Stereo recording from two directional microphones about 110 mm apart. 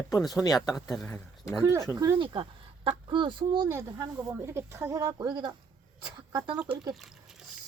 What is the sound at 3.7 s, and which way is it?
Speech, 25° right (ahead or behind).